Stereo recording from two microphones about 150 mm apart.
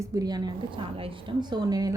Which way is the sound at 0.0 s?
25° right (ahead or behind).